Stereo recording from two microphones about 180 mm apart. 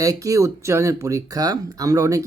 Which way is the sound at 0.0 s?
20° right (ahead or behind).